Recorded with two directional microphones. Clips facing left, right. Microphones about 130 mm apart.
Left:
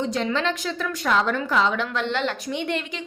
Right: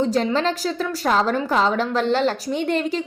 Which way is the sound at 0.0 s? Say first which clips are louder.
Right 4 dB; 40° right (ahead or behind).